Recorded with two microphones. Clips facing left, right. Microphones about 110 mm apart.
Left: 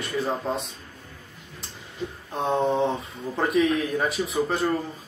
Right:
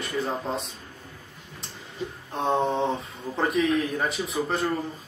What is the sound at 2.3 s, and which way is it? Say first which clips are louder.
Speech: left 1 dB; centre (ahead or behind).